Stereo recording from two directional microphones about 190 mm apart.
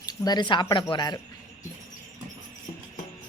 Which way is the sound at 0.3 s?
25° left (ahead or behind).